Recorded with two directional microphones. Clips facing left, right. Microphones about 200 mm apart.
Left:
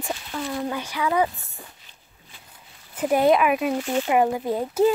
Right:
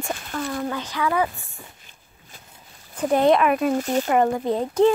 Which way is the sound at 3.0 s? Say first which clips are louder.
Right 1 dB; 5° left (ahead or behind).